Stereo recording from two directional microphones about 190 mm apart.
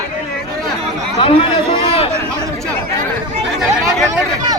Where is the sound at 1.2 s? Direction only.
30° left (ahead or behind).